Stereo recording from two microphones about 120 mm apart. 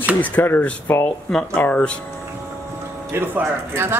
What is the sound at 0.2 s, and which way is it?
Speech, 15° left (ahead or behind).